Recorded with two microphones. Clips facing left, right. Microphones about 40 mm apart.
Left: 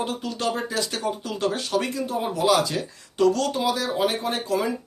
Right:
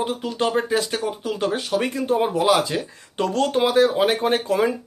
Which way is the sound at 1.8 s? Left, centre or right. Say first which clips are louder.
Right 5 dB; right.